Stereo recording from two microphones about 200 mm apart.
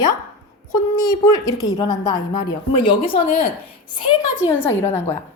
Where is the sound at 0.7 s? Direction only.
20° left (ahead or behind).